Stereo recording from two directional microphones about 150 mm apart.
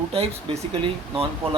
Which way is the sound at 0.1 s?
40° right (ahead or behind).